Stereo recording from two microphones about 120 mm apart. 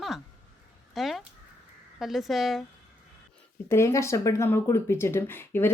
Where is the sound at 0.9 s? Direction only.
Centre (ahead or behind).